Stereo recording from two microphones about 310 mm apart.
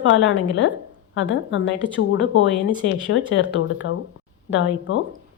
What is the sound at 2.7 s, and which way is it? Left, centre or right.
Speech, centre.